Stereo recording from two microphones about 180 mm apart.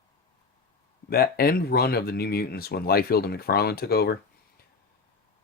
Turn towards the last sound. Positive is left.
turn(degrees=60)  # may be behind; listen again after turning